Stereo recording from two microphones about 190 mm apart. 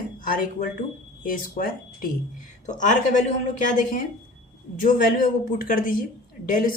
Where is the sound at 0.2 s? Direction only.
45° left (ahead or behind).